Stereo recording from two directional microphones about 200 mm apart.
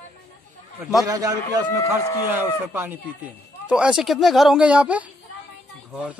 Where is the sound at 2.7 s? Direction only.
10° right (ahead or behind).